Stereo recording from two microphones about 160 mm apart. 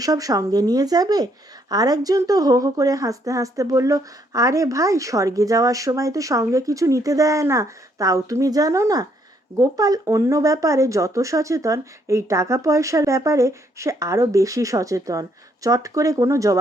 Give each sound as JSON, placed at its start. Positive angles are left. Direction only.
{"t": 0.0, "sound": "speech", "side_deg": -20}